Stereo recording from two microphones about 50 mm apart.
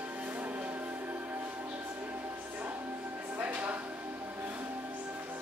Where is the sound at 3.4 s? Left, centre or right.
Right.